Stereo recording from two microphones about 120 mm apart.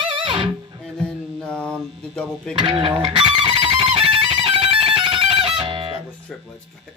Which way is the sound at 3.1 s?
50° right (ahead or behind).